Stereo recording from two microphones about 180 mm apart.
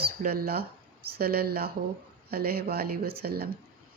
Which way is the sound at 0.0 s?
55° right (ahead or behind).